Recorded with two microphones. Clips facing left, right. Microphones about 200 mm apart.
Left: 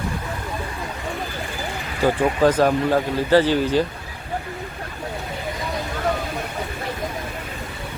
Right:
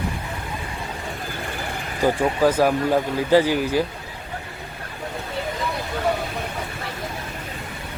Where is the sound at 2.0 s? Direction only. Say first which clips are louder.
Left 1 dB; 10° right (ahead or behind).